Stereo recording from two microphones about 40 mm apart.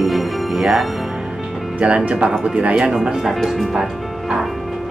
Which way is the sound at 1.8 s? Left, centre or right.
Right.